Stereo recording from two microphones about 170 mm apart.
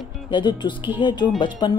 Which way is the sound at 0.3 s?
25° left (ahead or behind).